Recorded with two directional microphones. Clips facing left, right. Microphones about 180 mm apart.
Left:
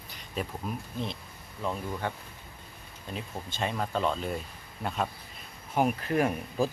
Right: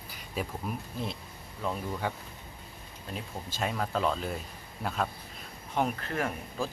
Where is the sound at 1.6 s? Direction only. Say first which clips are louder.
Even; centre (ahead or behind).